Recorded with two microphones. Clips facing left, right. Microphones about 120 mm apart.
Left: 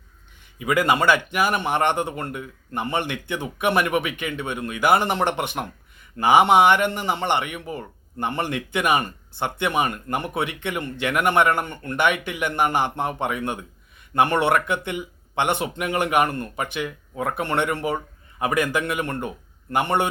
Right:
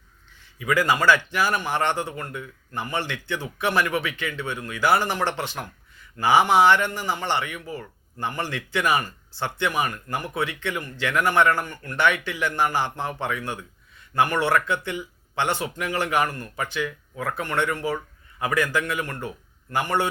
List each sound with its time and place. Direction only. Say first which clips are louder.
0.6 s speech: left 1 dB; 20° left (ahead or behind)